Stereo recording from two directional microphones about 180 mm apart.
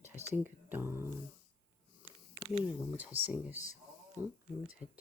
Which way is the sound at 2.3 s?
25° left (ahead or behind).